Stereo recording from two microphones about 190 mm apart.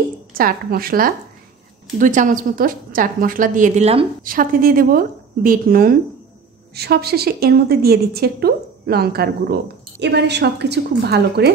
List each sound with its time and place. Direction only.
0.3 s a woman's voice: 50° right (ahead or behind)
4.2 s a woman's voice: 45° right (ahead or behind)